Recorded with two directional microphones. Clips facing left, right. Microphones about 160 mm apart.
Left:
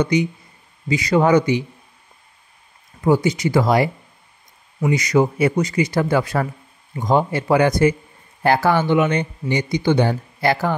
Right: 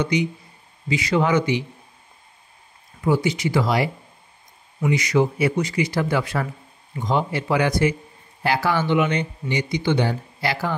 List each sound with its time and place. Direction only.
0.8 s a man's voice: 40° left (ahead or behind)
3.0 s speech: 40° left (ahead or behind)